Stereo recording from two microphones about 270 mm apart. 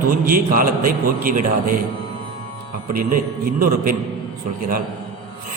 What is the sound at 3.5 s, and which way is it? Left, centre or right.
Speech, right.